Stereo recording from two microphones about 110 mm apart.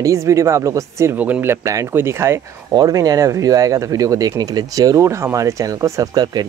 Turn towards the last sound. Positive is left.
turn(degrees=-40)  # may be behind; listen again after turning